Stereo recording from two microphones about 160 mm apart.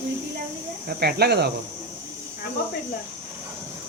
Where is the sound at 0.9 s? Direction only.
80° right.